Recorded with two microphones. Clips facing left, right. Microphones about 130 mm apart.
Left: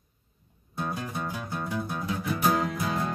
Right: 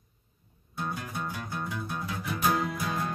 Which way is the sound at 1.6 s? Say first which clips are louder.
Left 4 dB; 25° left (ahead or behind).